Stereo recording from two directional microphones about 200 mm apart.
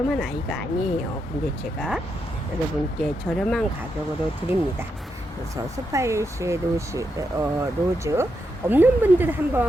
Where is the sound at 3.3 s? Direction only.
5° left (ahead or behind).